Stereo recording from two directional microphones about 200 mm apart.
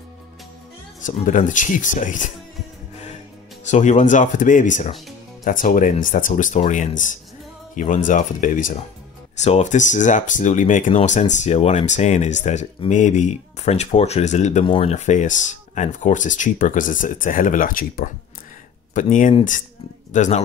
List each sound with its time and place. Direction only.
1.0 s speech: 40° left (ahead or behind)
3.6 s speech: 35° left (ahead or behind)